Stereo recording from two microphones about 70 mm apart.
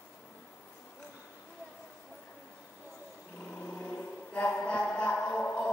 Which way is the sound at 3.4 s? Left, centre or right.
Centre.